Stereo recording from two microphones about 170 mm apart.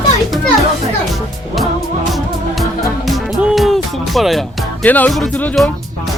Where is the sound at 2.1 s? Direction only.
Centre (ahead or behind).